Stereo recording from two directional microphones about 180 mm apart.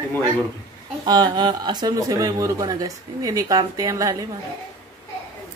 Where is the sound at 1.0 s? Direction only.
20° right (ahead or behind).